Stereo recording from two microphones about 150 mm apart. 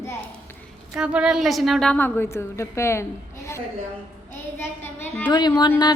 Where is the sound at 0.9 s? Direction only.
5° right (ahead or behind); by 5.2 s 15° left (ahead or behind).